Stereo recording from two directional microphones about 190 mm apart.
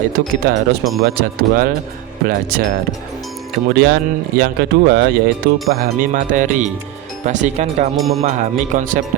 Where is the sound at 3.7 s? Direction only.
60° right (ahead or behind).